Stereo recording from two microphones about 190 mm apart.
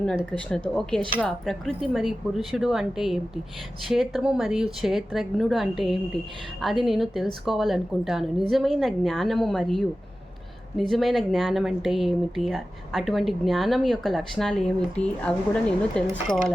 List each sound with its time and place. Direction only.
0.0 s speech: 5° left (ahead or behind)